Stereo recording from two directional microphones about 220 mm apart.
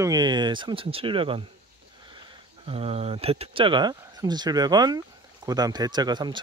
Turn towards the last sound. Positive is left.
turn(degrees=-20)  # may be behind; listen again after turning